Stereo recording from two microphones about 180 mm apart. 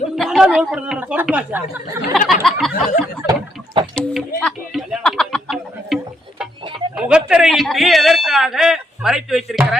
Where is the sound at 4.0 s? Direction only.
5° left (ahead or behind).